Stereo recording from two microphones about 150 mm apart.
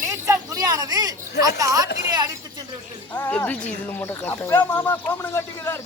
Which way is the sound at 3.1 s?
10° left (ahead or behind).